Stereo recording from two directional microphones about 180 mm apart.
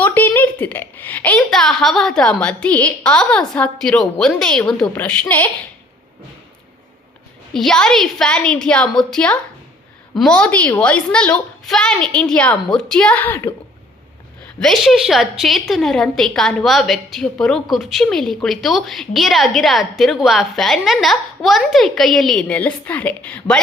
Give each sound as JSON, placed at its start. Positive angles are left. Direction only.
{"t": 0.0, "sound": "a woman's voice", "side_deg": 10}
{"t": 7.5, "sound": "a woman's voice", "side_deg": 5}
{"t": 14.6, "sound": "a woman's voice", "side_deg": 0}